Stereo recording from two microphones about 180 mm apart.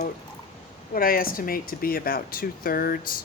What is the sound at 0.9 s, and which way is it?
Speech, 55° left (ahead or behind).